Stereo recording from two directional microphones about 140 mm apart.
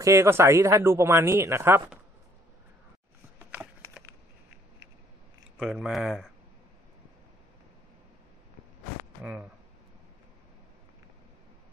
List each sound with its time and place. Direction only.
0.0 s speech: 20° right (ahead or behind)
5.6 s speech: 5° right (ahead or behind)
9.2 s speech: 10° right (ahead or behind)